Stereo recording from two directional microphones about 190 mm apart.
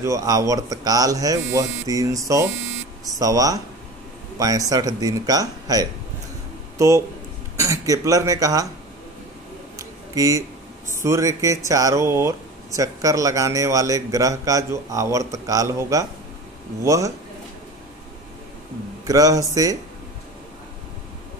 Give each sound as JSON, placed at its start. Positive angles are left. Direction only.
{"t": 0.0, "sound": "speech", "side_deg": -15}
{"t": 7.6, "sound": "speech", "side_deg": -15}
{"t": 9.8, "sound": "a sound", "side_deg": -15}
{"t": 11.1, "sound": "speech", "side_deg": -15}
{"t": 19.0, "sound": "speech", "side_deg": -20}